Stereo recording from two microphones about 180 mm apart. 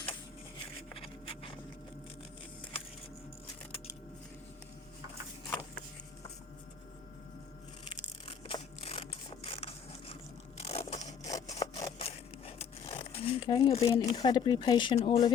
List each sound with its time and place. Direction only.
0.9 s a sound: 30° left (ahead or behind)
7.9 s mechanisms: 30° left (ahead or behind)
10.6 s crushing: 35° left (ahead or behind)
11.3 s sawing: 20° left (ahead or behind)
11.6 s a sound: 20° left (ahead or behind)
12.0 s crumpling: 35° left (ahead or behind)
15.0 s speech: 25° left (ahead or behind)